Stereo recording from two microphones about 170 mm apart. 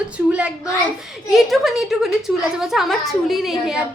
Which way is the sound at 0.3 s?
5° right (ahead or behind).